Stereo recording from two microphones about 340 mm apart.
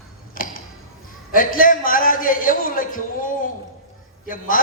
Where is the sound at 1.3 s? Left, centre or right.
Left.